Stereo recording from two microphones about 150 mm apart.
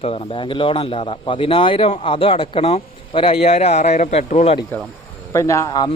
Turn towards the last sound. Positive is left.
turn(degrees=30)  # may be behind; listen again after turning